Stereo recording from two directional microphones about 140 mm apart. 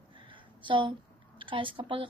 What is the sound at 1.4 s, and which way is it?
Speech, 40° right (ahead or behind).